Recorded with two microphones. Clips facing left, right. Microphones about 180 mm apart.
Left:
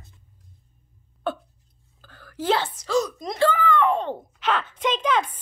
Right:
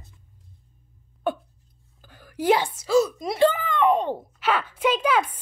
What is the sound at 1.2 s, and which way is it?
Hiccup, 10° right (ahead or behind).